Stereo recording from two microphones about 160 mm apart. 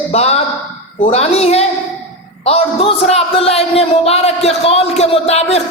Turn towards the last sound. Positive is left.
turn(degrees=40)  # may be behind; listen again after turning